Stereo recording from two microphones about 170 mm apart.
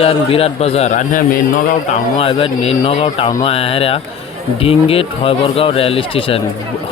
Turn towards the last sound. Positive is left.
turn(degrees=30)  # may be behind; listen again after turning